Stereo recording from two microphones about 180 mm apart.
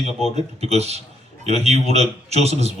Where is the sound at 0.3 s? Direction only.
35° right (ahead or behind).